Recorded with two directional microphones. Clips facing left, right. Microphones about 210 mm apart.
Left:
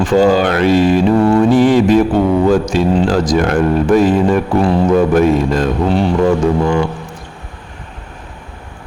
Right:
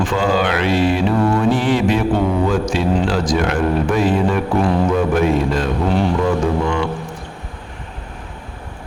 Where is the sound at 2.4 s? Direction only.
40° left (ahead or behind).